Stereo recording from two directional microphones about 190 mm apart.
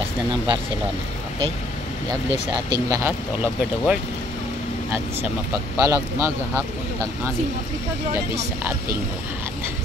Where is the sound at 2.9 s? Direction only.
10° right (ahead or behind).